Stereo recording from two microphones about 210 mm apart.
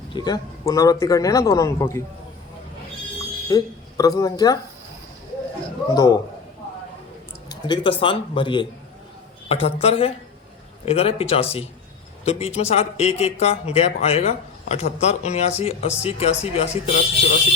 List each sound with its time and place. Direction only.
0.1 s a man's voice: 20° left (ahead or behind)
3.5 s speech: 15° left (ahead or behind)
5.9 s a man's voice: 15° left (ahead or behind)
7.7 s speech: 25° left (ahead or behind)